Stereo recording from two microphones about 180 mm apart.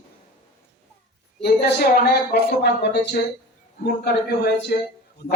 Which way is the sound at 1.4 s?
60° left (ahead or behind).